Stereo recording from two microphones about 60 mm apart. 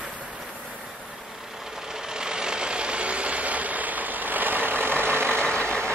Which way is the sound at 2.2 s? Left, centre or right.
Centre.